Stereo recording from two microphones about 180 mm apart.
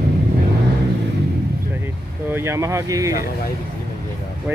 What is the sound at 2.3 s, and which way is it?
Speech, 15° right (ahead or behind).